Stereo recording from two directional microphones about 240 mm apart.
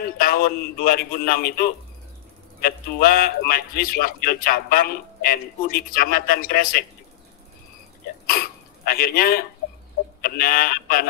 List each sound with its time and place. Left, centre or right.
0.2 s speech: left
8.3 s speech: left